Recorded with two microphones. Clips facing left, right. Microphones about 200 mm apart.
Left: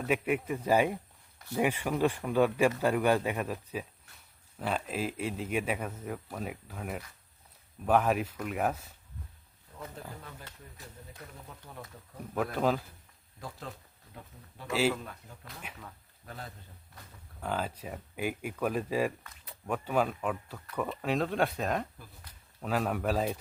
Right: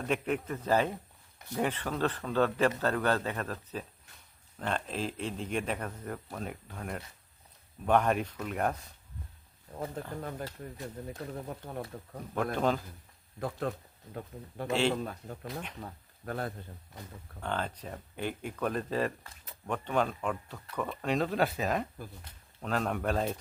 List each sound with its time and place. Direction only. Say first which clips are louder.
0.0 s speech: left 2 dB; 5° left (ahead or behind)
10.2 s speech: right 10 dB; 50° right (ahead or behind)
12.5 s speech: left 1 dB; 5° left (ahead or behind)
13.4 s speech: right 9 dB; 60° right (ahead or behind)
14.7 s speech: even; 5° left (ahead or behind)
14.9 s speech: right 7 dB; 35° right (ahead or behind)
15.4 s speech: right 7 dB; 5° left (ahead or behind)
16.2 s speech: right 9 dB; 60° right (ahead or behind)
17.4 s speech: left 1 dB; 5° left (ahead or behind)
22.3 s speech: right 1 dB; 25° right (ahead or behind)
22.6 s speech: left 1 dB; 5° left (ahead or behind)